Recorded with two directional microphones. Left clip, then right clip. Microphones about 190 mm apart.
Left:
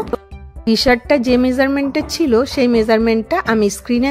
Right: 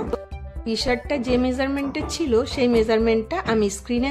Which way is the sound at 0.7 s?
35° left (ahead or behind).